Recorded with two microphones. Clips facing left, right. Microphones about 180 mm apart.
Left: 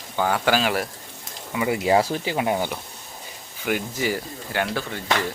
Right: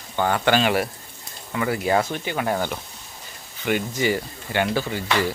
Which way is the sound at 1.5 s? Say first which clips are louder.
Left 2 dB; 15° left (ahead or behind).